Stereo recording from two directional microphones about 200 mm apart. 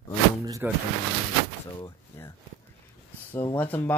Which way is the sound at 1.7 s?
20° left (ahead or behind).